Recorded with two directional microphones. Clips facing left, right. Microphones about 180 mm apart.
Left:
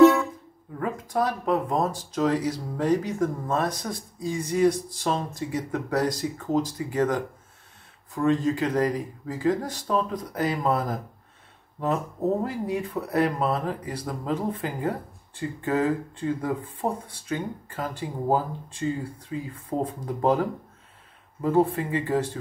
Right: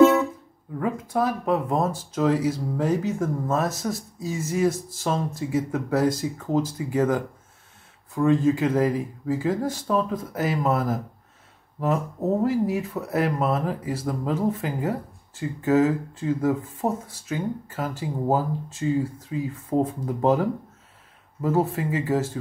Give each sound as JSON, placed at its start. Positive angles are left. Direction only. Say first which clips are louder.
{"t": 0.0, "sound": "music", "louder": "even", "side_deg": -20}
{"t": 0.7, "sound": "speech", "louder": "right 2 dB", "side_deg": -5}
{"t": 21.4, "sound": "speech", "louder": "left 1 dB", "side_deg": -5}